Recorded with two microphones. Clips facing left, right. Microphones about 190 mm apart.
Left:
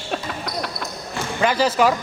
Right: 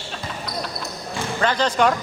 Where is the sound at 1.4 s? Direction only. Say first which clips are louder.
Left 2 dB; 10° left (ahead or behind).